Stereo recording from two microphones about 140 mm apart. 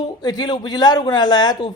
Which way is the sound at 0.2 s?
30° left (ahead or behind).